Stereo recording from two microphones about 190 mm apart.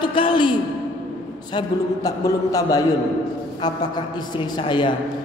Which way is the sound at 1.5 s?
20° left (ahead or behind).